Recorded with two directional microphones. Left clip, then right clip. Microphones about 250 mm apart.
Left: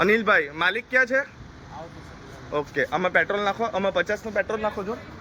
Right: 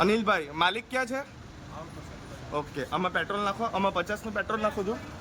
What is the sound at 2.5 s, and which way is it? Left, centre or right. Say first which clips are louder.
Speech: left 7 dB; centre.